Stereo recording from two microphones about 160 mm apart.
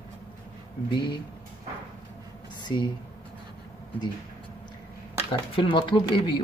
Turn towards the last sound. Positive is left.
turn(degrees=30)  # may be behind; listen again after turning